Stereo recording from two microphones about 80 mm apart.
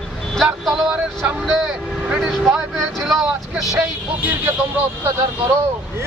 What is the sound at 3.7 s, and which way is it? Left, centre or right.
Speech, right.